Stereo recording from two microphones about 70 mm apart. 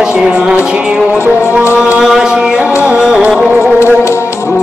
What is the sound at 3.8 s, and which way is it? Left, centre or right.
Music, left.